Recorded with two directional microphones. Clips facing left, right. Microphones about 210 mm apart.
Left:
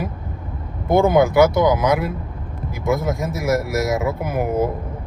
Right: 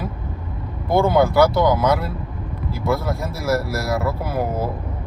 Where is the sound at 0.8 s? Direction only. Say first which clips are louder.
Left 2 dB; 20° left (ahead or behind).